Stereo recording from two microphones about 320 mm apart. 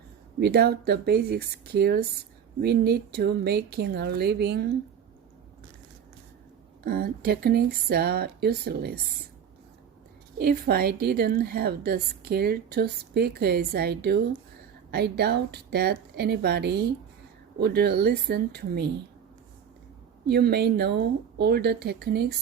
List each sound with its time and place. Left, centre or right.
0.3 s a woman's voice: right
6.8 s a woman's voice: right
10.3 s a woman's voice: right
20.2 s a woman's voice: right